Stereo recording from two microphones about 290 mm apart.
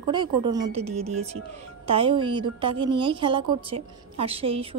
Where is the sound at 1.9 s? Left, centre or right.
Centre.